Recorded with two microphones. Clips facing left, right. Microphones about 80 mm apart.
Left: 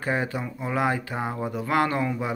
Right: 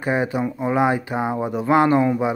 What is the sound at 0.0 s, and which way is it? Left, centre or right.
Speech, centre.